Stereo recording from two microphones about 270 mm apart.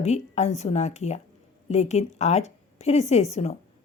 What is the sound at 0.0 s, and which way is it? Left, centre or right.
A woman's voice, left.